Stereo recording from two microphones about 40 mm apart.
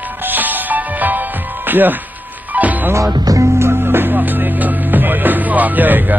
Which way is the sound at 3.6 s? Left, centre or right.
Right.